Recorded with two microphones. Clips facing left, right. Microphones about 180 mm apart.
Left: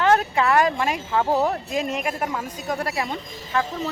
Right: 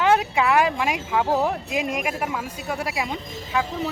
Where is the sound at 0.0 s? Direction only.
10° right (ahead or behind).